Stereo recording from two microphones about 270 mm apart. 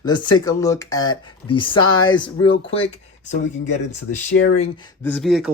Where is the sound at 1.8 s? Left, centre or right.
Left.